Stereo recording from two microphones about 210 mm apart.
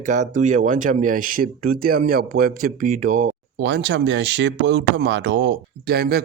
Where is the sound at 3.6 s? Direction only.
55° right (ahead or behind).